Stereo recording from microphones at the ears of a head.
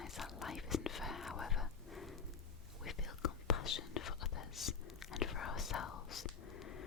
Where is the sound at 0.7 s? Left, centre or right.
Left.